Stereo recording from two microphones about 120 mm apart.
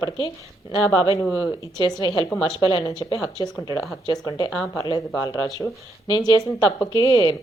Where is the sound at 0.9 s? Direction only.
40° left (ahead or behind).